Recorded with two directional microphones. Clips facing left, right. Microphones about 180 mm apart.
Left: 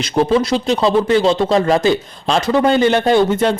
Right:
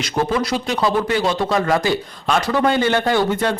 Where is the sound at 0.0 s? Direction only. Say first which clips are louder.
Left 5 dB; 30° left (ahead or behind).